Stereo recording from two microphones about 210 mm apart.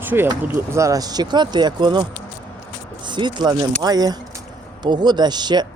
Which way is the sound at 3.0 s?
20° right (ahead or behind).